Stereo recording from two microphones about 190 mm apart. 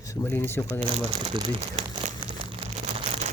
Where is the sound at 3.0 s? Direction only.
35° right (ahead or behind).